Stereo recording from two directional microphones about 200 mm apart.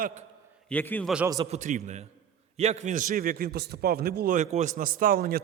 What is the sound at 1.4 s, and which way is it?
A man's voice, 35° right (ahead or behind).